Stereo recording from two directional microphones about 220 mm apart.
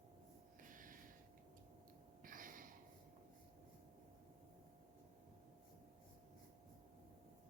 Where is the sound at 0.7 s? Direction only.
35° right (ahead or behind).